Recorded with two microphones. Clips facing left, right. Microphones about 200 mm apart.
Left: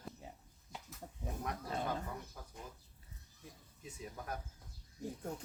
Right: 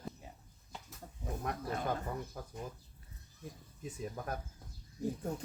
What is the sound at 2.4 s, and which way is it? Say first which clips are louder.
Speech: right 7 dB; 50° right (ahead or behind).